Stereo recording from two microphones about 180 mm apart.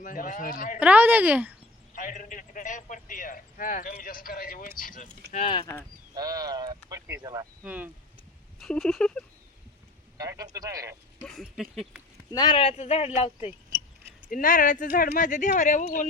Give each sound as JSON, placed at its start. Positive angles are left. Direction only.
{"t": 0.0, "sound": "a man's voice", "side_deg": 50}
{"t": 0.8, "sound": "speech", "side_deg": -10}
{"t": 2.0, "sound": "a man's voice", "side_deg": 45}
{"t": 5.3, "sound": "speech", "side_deg": 30}
{"t": 6.1, "sound": "speech", "side_deg": -20}
{"t": 7.6, "sound": "speech", "side_deg": -10}
{"t": 10.2, "sound": "speech", "side_deg": -20}
{"t": 11.2, "sound": "speech", "side_deg": 5}
{"t": 12.3, "sound": "speech", "side_deg": 25}
{"t": 14.3, "sound": "a man's voice", "side_deg": 50}